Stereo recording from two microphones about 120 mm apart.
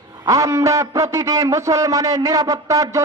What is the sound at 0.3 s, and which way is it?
A man's voice, 25° right (ahead or behind).